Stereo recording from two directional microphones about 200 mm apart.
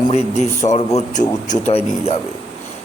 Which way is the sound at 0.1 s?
35° left (ahead or behind).